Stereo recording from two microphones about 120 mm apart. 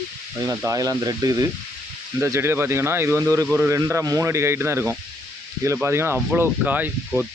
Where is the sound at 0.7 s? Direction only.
30° right (ahead or behind).